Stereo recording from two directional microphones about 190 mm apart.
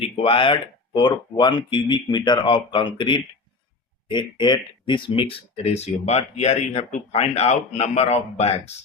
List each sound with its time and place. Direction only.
0.0 s speech: 30° left (ahead or behind)